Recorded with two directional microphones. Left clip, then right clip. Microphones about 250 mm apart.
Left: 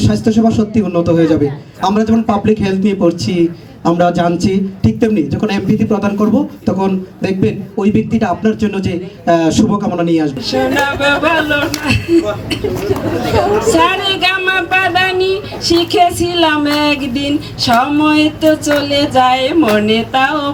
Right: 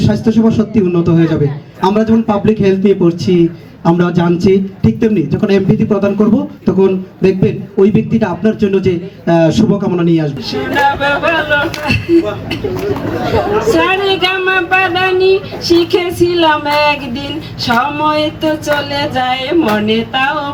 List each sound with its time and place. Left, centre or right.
0.0 s speech: centre
13.7 s speech: centre